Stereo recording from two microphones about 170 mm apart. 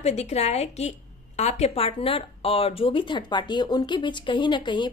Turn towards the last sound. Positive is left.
turn(degrees=30)  # may be behind; listen again after turning